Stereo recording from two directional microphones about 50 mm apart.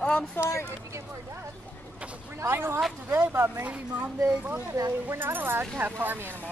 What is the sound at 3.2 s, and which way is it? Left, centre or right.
Speech, right.